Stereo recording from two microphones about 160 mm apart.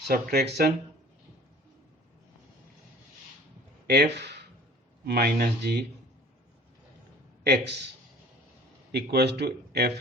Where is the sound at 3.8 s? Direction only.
90° right.